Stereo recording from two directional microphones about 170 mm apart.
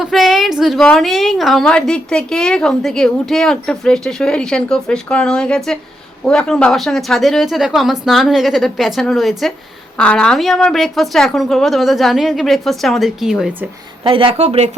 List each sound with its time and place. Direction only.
0.0 s a woman's voice: centre (ahead or behind)
14.0 s speech: 30° right (ahead or behind)